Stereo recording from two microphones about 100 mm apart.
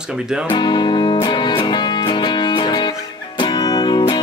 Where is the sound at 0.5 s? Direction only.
50° left (ahead or behind).